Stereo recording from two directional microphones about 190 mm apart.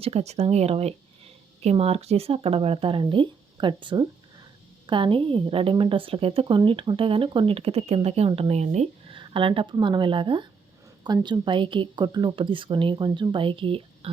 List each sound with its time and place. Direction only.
0.0 s speech: 35° right (ahead or behind)